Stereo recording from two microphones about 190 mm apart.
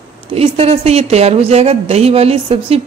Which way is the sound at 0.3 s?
30° right (ahead or behind).